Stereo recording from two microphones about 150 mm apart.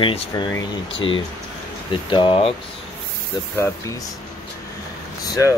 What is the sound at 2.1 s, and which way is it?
Speech, 35° left (ahead or behind).